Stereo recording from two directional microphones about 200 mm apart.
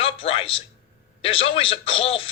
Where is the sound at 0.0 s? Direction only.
30° left (ahead or behind).